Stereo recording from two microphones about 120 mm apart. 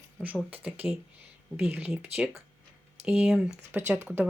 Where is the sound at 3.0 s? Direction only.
15° right (ahead or behind).